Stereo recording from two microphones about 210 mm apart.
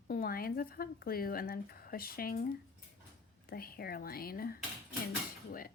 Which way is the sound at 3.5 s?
45° left (ahead or behind).